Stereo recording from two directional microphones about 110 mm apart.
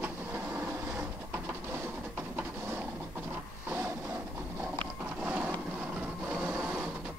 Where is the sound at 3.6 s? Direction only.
20° right (ahead or behind).